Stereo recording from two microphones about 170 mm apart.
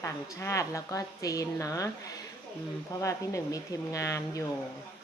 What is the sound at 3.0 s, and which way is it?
A woman's voice, 20° left (ahead or behind).